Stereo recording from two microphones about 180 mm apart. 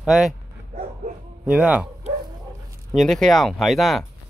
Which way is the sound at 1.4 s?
5° right (ahead or behind).